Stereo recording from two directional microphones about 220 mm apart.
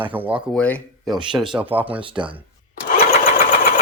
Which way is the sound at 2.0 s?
25° right (ahead or behind).